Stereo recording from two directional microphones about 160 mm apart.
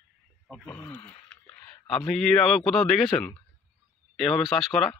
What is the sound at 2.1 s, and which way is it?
Speech, centre (ahead or behind).